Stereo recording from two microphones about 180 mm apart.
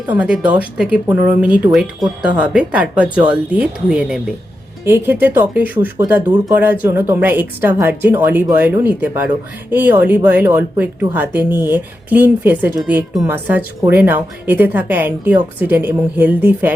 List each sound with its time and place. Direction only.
0.1 s speech: 10° right (ahead or behind)